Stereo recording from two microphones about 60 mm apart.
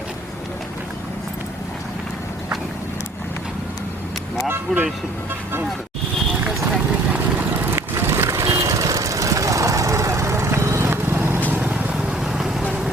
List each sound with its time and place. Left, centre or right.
4.7 s speech: centre
7.7 s boat: right
8.3 s vehicle: right
11.9 s vehicle: centre